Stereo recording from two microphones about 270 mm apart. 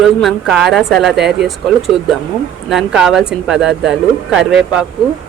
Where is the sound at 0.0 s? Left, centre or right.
Centre.